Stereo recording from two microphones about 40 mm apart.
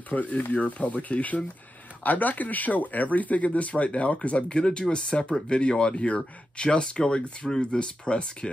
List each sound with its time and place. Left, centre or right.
0.1 s speech: left